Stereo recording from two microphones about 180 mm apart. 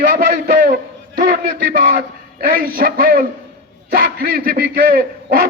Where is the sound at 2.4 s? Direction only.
55° right (ahead or behind).